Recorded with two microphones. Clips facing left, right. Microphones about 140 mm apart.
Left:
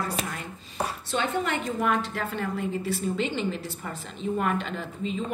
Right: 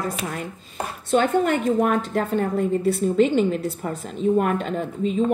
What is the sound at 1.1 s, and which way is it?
Speech, 50° right (ahead or behind).